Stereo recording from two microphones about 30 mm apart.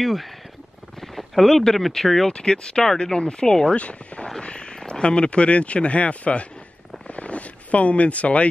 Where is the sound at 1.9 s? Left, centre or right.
Centre.